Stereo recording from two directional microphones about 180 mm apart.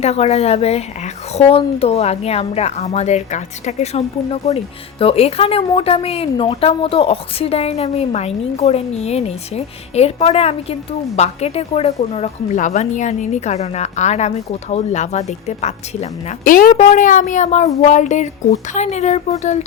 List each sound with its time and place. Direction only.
0.0 s a woman's voice: 35° left (ahead or behind)